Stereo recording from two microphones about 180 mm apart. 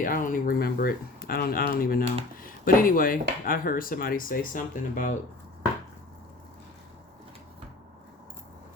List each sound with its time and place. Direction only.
0.0 s speech: 50° left (ahead or behind)